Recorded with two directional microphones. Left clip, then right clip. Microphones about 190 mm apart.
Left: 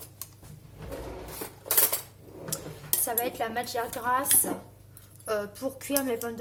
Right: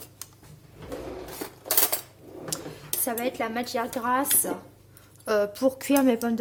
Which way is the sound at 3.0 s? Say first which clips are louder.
Right 2 dB; 40° right (ahead or behind).